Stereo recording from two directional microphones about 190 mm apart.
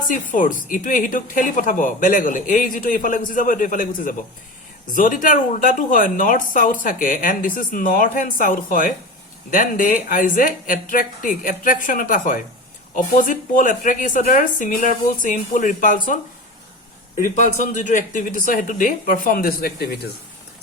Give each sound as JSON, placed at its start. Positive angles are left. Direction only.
{"t": 0.1, "sound": "speech", "side_deg": 45}
{"t": 17.2, "sound": "speech", "side_deg": 45}